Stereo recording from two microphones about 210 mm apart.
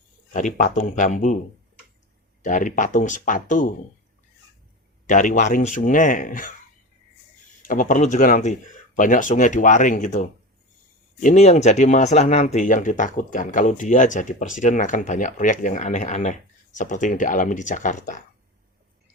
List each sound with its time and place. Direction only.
0.3 s speech: 40° left (ahead or behind)
2.4 s speech: 40° left (ahead or behind)
5.0 s speech: 35° left (ahead or behind)
7.7 s speech: 40° left (ahead or behind)